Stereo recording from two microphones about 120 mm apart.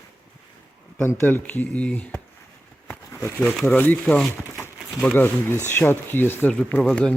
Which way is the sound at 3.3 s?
5° left (ahead or behind).